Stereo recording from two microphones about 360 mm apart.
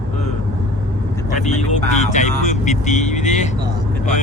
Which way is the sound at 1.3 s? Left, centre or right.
Centre.